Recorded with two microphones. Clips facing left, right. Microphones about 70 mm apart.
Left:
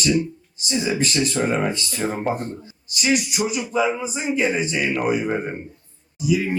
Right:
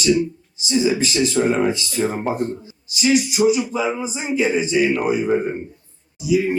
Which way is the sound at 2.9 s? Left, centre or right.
Left.